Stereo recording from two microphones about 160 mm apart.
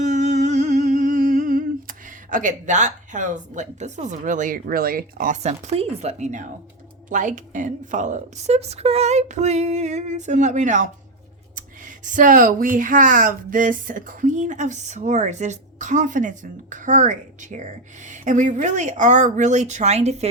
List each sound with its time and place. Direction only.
0.0 s humming: 50° right (ahead or behind)
7.1 s speech: 50° right (ahead or behind)